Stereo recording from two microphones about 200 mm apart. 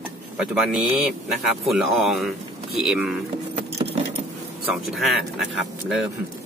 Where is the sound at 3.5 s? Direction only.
30° right (ahead or behind).